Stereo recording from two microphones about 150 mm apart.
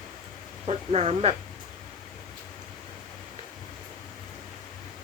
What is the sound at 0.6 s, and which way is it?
Speech, 45° right (ahead or behind).